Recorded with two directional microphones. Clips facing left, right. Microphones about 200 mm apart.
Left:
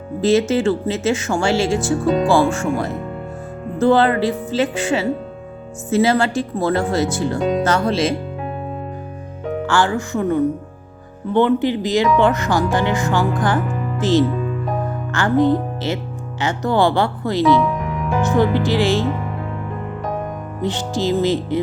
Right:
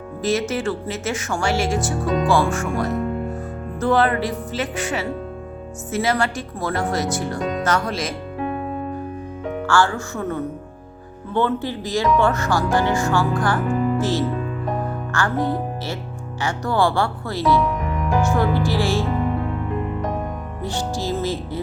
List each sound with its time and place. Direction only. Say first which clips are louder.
0.2 s speech: left 6 dB; 25° left (ahead or behind)
9.6 s speech: left 1 dB; 20° left (ahead or behind)
20.6 s speech: left 5 dB; 20° left (ahead or behind)